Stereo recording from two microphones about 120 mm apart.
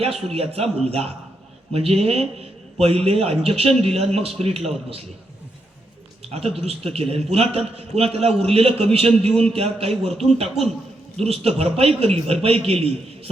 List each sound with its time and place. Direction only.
0.0 s a man's voice: 55° right (ahead or behind)
1.7 s a man's voice: 55° right (ahead or behind)
6.3 s a man's voice: 55° right (ahead or behind)